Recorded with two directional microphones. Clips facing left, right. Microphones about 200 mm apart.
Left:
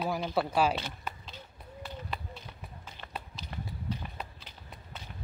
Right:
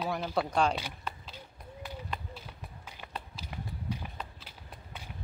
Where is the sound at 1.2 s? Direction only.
10° right (ahead or behind).